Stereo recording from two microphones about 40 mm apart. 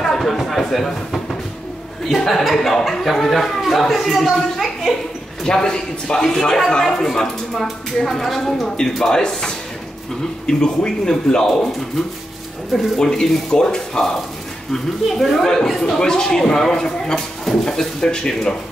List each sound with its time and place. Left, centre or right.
0.0 s a man's voice: centre
5.4 s speech: centre
12.7 s speech: centre
14.7 s speech: centre